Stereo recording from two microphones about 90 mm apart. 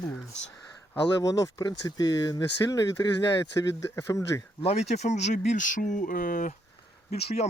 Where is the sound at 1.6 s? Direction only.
50° left (ahead or behind).